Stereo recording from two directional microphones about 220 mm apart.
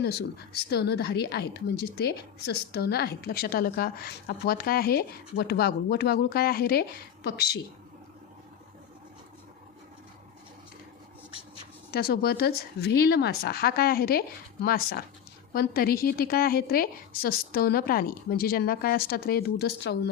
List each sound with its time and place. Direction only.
0.0 s a woman's voice: 45° left (ahead or behind)
11.9 s a woman's voice: 45° left (ahead or behind)